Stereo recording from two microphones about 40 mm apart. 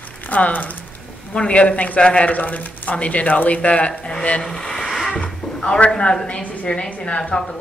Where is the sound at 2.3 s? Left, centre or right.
Left.